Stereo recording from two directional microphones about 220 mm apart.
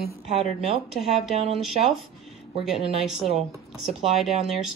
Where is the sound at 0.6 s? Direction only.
Centre (ahead or behind).